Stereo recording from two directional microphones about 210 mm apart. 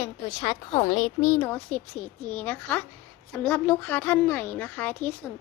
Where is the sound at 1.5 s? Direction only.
5° left (ahead or behind).